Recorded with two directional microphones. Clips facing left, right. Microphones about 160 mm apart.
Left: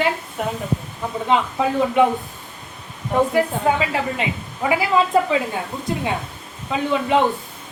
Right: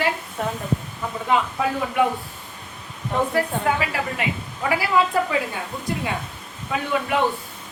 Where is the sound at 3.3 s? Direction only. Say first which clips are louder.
Left 3 dB; 20° left (ahead or behind).